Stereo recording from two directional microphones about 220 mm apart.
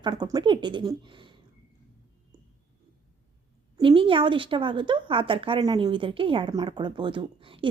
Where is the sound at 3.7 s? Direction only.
25° right (ahead or behind).